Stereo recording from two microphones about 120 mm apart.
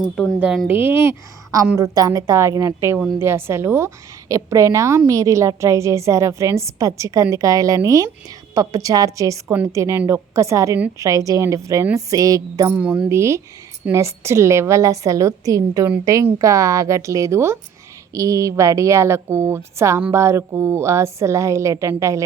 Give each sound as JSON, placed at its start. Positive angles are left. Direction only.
{"t": 0.2, "sound": "a woman's voice", "side_deg": -5}
{"t": 12.7, "sound": "a woman's voice", "side_deg": -10}
{"t": 13.1, "sound": "a woman's voice", "side_deg": -25}